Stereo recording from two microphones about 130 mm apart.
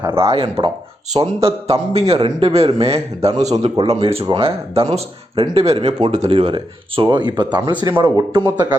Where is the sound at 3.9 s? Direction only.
50° right (ahead or behind).